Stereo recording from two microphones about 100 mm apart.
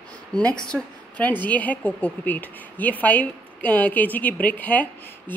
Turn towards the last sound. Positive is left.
turn(degrees=15)  # may be behind; listen again after turning